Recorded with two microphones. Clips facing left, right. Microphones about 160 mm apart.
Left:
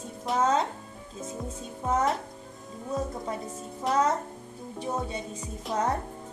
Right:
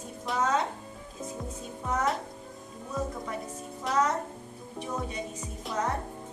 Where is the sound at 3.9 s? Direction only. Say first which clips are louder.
Left 2 dB; centre (ahead or behind).